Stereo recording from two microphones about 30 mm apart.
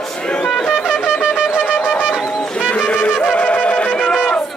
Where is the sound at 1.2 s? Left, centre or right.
Right.